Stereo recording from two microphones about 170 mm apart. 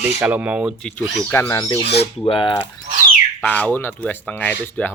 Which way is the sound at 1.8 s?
75° left (ahead or behind).